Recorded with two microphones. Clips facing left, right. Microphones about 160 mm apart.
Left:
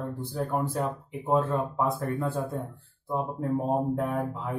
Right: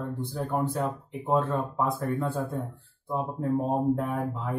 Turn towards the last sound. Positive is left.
turn(degrees=0)  # may be behind; listen again after turning